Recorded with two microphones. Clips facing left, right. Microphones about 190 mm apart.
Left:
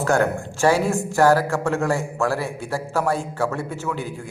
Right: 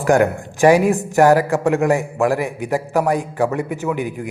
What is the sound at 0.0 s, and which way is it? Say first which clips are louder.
Speech: right 5 dB; 15° right (ahead or behind).